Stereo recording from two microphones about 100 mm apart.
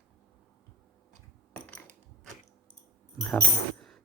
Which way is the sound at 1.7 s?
10° left (ahead or behind).